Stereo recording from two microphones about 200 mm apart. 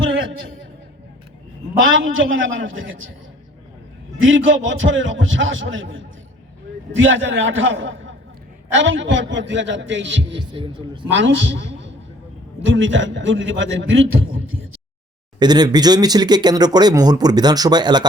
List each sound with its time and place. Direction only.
1.8 s a man's voice: 75° right (ahead or behind)
4.2 s a man's voice: 75° right (ahead or behind)
10.3 s speech: 25° right (ahead or behind)
11.1 s a man's voice: 65° right (ahead or behind)
14.4 s speech: 90° right
15.4 s speech: 20° right (ahead or behind)